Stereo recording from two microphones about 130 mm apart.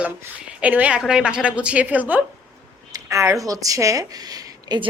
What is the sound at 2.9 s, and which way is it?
Speech, 25° right (ahead or behind).